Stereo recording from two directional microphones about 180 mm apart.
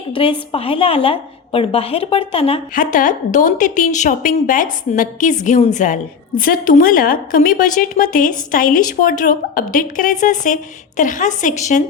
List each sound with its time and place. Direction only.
0.1 s a woman's voice: 30° left (ahead or behind)
2.7 s a woman's voice: 45° left (ahead or behind)